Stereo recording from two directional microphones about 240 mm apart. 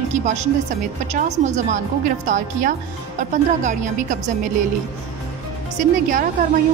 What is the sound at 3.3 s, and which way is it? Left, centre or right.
Speech, right.